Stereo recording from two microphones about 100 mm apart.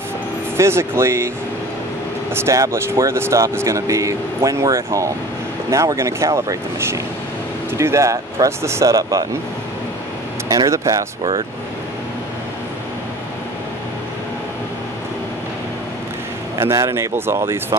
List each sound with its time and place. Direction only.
0.6 s speech: 25° right (ahead or behind)
2.3 s speech: 30° right (ahead or behind)
10.5 s speech: 35° right (ahead or behind)
16.5 s speech: 25° right (ahead or behind)